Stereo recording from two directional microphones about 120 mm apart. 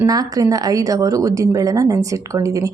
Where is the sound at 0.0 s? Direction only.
30° right (ahead or behind).